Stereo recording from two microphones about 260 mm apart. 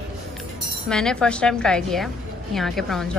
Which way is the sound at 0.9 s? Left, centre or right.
Centre.